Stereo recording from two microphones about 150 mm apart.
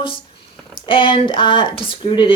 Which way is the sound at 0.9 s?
35° left (ahead or behind).